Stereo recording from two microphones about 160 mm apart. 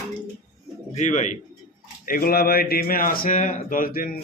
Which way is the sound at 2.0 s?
65° left (ahead or behind).